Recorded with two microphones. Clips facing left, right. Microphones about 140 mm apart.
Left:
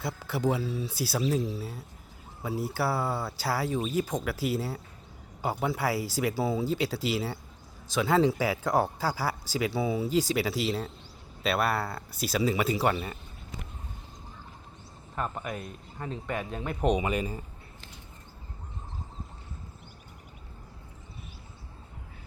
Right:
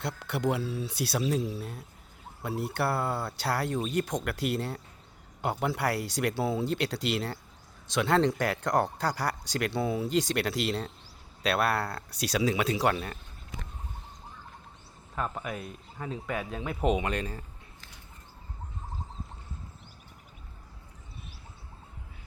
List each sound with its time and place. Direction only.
0.0 s speech: centre (ahead or behind)
15.1 s speech: centre (ahead or behind)